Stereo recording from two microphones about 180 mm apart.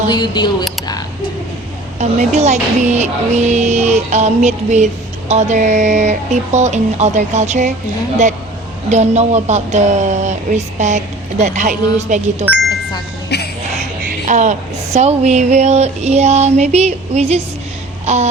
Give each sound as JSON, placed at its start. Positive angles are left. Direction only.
{"t": 0.1, "sound": "speech", "side_deg": 25}
{"t": 2.0, "sound": "speech", "side_deg": -40}
{"t": 8.9, "sound": "speech", "side_deg": -40}
{"t": 13.3, "sound": "music", "side_deg": 65}
{"t": 14.1, "sound": "a sound", "side_deg": -45}
{"t": 14.9, "sound": "speech", "side_deg": -35}
{"t": 18.0, "sound": "a sound", "side_deg": -40}